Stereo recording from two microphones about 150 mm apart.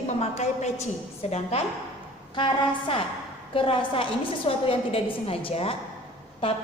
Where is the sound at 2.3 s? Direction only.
35° left (ahead or behind).